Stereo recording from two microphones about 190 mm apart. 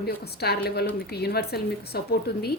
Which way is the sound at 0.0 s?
55° left (ahead or behind).